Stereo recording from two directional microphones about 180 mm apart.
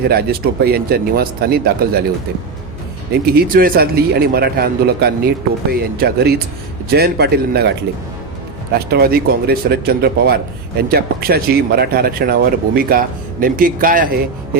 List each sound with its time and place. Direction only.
0.1 s speech: 60° right (ahead or behind)
3.3 s speech: 50° right (ahead or behind)
8.7 s speech: 60° right (ahead or behind)